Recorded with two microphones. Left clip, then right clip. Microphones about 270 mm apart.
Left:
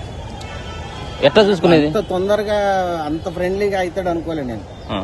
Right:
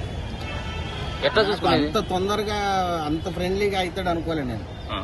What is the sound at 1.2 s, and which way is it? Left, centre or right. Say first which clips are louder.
Speech: left 8 dB; left.